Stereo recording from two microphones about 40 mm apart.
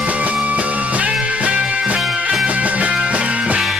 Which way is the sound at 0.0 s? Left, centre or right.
Right.